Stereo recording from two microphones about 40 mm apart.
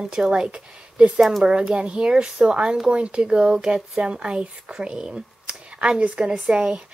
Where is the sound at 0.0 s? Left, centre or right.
Centre.